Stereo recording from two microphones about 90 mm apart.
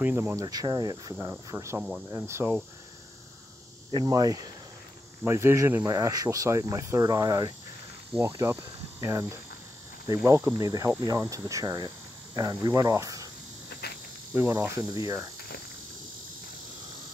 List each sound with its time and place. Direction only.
0.0 s cricket: 25° right (ahead or behind)
0.4 s speech: 45° right (ahead or behind)
1.5 s speech: 30° right (ahead or behind)
1.8 s speech: 10° right (ahead or behind)
2.0 s speech: 35° right (ahead or behind)
4.0 s speech: 40° right (ahead or behind)
5.2 s cricket: 30° right (ahead or behind)
5.8 s speech: 40° right (ahead or behind)
14.3 s cricket: 25° right (ahead or behind)
14.8 s speech: 40° right (ahead or behind)